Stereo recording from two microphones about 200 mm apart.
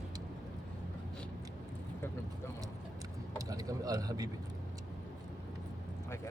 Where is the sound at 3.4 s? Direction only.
15° right (ahead or behind).